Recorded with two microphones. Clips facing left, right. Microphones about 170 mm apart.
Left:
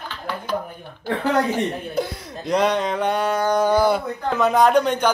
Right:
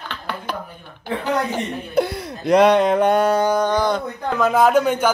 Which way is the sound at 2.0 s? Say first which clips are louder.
Right 5 dB; 65° right (ahead or behind).